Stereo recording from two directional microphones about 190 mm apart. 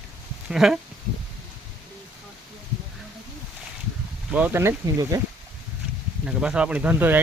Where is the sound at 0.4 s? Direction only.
Centre (ahead or behind).